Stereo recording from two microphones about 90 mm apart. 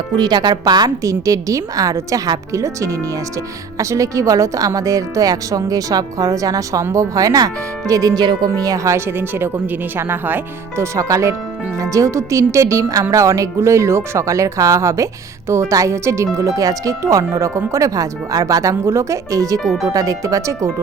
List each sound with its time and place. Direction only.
0.2 s a woman's voice: 50° right (ahead or behind); by 10.8 s 20° right (ahead or behind)
10.9 s a woman's voice: 35° right (ahead or behind)
19.5 s speech: 5° left (ahead or behind)
19.9 s a woman's voice: 40° right (ahead or behind)